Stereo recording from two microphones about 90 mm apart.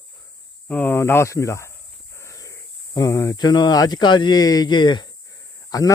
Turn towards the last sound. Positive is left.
turn(degrees=45)  # may be behind; listen again after turning